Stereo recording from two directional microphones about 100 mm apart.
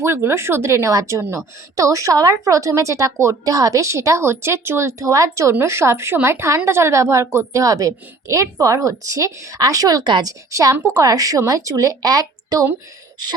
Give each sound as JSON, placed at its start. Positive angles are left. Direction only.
{"t": 0.0, "sound": "a woman's voice", "side_deg": -25}
{"t": 10.5, "sound": "a woman's voice", "side_deg": -35}